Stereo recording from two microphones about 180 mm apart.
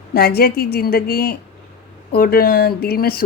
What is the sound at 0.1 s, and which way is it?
Speech, 60° left (ahead or behind).